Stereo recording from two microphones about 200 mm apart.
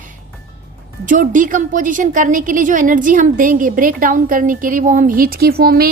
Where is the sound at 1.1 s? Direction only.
40° right (ahead or behind).